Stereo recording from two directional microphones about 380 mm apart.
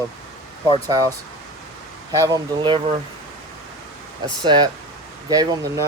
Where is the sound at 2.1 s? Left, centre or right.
Centre.